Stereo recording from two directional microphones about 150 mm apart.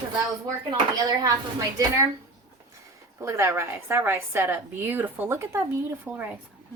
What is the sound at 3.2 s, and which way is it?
A woman's voice, 20° right (ahead or behind).